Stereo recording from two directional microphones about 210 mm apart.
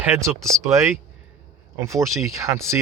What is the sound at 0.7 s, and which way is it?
Speech, 10° right (ahead or behind).